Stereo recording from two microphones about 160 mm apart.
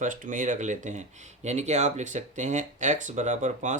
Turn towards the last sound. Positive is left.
turn(degrees=-50)  # may be behind; listen again after turning